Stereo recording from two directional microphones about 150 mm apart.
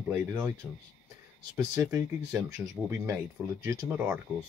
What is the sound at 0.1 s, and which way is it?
Speech, 20° right (ahead or behind).